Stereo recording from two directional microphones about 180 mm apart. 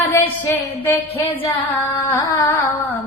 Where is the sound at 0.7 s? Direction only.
15° left (ahead or behind).